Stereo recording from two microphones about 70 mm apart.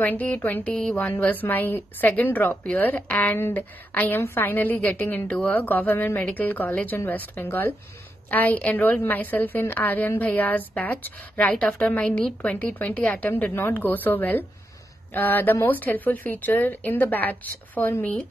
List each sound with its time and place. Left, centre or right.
0.0 s a woman's voice: left